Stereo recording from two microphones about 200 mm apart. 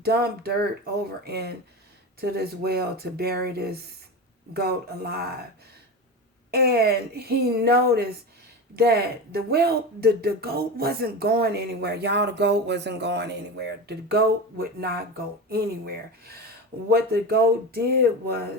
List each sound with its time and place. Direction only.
0.0 s speech: 50° right (ahead or behind)
6.5 s speech: 50° right (ahead or behind)